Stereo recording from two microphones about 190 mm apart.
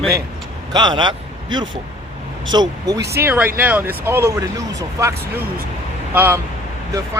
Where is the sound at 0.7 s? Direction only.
25° right (ahead or behind).